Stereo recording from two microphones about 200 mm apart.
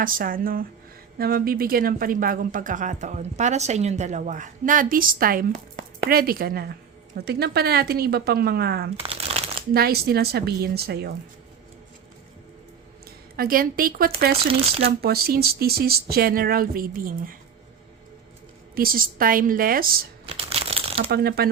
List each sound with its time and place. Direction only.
0.0 s speech: 45° right (ahead or behind)
9.0 s shuffling cards: 30° right (ahead or behind)
9.7 s speech: 50° right (ahead or behind)
13.3 s speech: 45° right (ahead or behind)
14.6 s speech: 30° right (ahead or behind)
15.0 s speech: 50° right (ahead or behind)
18.7 s speech: 50° right (ahead or behind)
20.2 s crumpling: 30° right (ahead or behind)
21.1 s speech: 50° right (ahead or behind)